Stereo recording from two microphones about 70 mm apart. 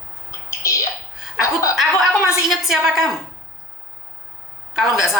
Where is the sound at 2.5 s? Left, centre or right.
Centre.